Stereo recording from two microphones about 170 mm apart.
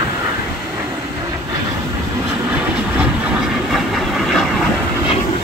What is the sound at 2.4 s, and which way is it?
Train, 5° right (ahead or behind).